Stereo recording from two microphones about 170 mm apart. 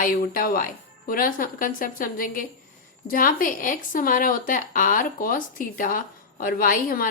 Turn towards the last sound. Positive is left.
turn(degrees=55)  # may be behind; listen again after turning